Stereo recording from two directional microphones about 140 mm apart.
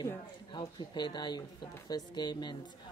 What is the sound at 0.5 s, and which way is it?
Speech, 30° left (ahead or behind).